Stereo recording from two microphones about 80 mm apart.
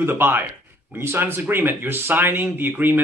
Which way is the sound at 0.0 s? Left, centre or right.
Right.